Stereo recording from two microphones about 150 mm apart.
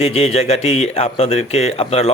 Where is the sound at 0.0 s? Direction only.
40° left (ahead or behind).